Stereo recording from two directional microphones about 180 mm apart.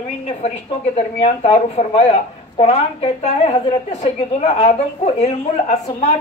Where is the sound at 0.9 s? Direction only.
35° left (ahead or behind).